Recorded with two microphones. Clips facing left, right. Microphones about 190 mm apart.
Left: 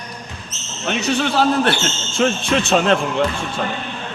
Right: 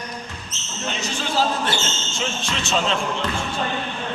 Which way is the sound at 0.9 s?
65° left (ahead or behind).